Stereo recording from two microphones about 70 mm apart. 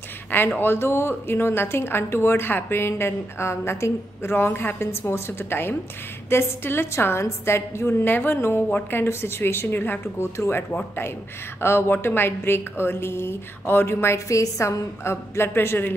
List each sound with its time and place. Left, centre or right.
0.6 s speech: left
10.3 s speech: left
11.6 s speech: left